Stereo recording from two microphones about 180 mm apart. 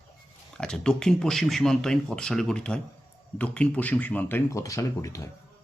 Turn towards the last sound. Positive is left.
turn(degrees=15)  # may be behind; listen again after turning